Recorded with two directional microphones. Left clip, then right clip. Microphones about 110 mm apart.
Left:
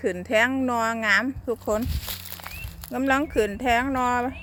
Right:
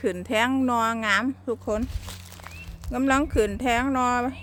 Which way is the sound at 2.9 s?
10° right (ahead or behind).